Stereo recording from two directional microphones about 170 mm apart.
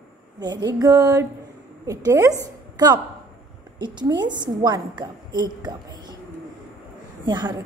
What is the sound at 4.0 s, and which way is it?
A woman's voice, 25° right (ahead or behind).